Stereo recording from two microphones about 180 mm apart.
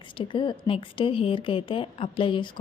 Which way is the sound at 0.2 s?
25° left (ahead or behind).